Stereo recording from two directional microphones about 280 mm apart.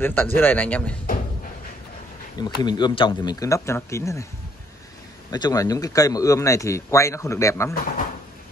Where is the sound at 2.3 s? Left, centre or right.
Centre.